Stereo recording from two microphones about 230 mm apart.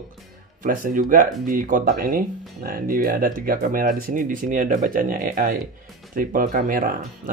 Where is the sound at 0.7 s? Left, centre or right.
Right.